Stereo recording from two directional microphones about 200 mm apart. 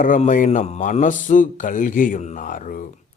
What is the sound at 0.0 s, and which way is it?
Speech, 40° left (ahead or behind).